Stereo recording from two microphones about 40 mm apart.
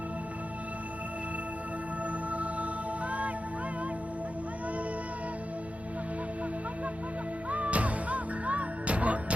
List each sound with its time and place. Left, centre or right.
2.3 s music: right
7.5 s music: right